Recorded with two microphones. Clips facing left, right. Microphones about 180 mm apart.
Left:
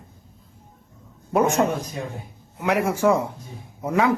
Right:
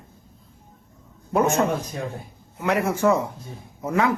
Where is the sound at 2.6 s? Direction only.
10° left (ahead or behind).